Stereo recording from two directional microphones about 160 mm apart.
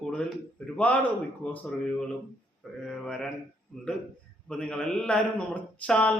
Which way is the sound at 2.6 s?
5° left (ahead or behind).